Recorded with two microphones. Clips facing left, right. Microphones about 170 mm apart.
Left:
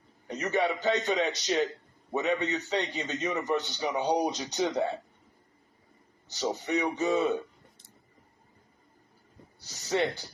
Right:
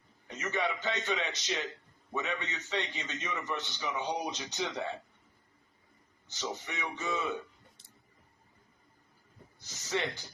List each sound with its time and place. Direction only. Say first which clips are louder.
0.3 s a man's voice: left 6 dB; 35° left (ahead or behind)
6.2 s a man's voice: left 8 dB; 35° left (ahead or behind)
9.6 s a man's voice: left 6 dB; 35° left (ahead or behind)